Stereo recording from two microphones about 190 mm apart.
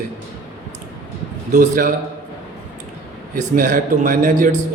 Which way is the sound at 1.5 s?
45° right (ahead or behind).